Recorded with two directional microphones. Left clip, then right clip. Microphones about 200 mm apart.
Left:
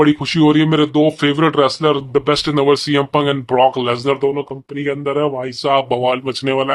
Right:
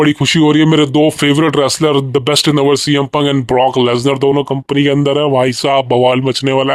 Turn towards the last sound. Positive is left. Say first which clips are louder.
# right 4 dB
turn(degrees=-35)  # may be behind; listen again after turning